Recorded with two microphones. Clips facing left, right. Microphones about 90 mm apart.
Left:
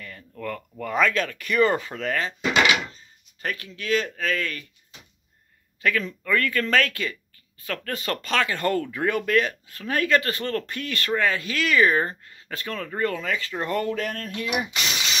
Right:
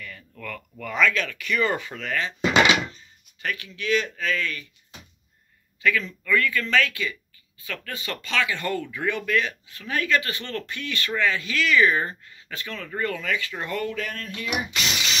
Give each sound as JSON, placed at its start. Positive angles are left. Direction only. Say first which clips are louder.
{"t": 0.4, "sound": "speech", "louder": "left 5 dB", "side_deg": 35}
{"t": 2.5, "sound": "a sound", "louder": "right 2 dB", "side_deg": -25}
{"t": 3.4, "sound": "speech", "louder": "even", "side_deg": 40}
{"t": 5.8, "sound": "speech", "louder": "even", "side_deg": 40}